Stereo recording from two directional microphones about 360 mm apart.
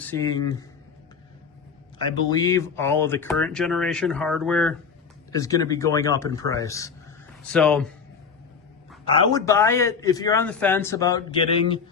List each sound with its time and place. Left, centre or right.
0.0 s a man's voice: centre
2.0 s a man's voice: centre
9.1 s a man's voice: centre